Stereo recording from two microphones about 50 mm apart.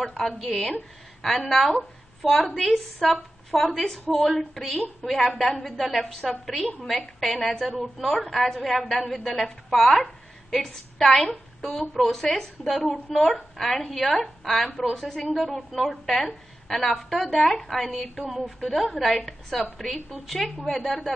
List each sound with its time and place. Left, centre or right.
0.0 s a woman's voice: centre